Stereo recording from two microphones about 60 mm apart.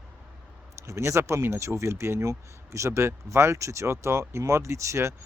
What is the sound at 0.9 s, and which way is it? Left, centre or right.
Speech, right.